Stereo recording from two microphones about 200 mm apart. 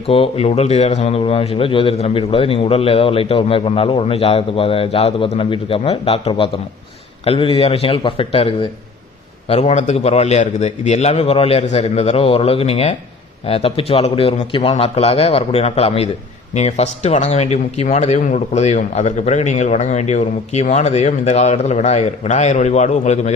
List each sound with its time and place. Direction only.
0.1 s a man's voice: 30° left (ahead or behind)